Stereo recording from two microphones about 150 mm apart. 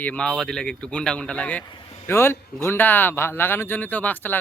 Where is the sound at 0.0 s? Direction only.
10° left (ahead or behind).